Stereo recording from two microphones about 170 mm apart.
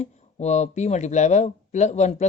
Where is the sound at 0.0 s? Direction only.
40° left (ahead or behind).